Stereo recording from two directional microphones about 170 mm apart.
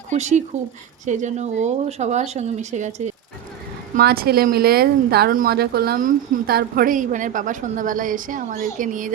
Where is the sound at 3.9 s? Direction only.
65° right (ahead or behind).